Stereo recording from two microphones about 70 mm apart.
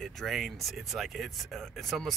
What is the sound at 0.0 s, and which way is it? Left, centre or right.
Speech, centre.